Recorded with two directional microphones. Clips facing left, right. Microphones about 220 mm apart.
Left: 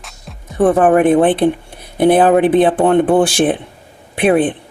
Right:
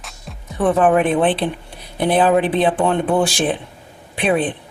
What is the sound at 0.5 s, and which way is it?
Speech, 45° left (ahead or behind).